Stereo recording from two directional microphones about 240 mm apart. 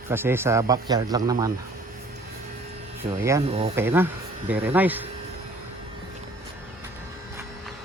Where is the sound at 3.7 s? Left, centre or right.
Centre.